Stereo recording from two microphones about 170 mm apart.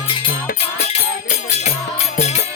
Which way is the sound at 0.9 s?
40° left (ahead or behind).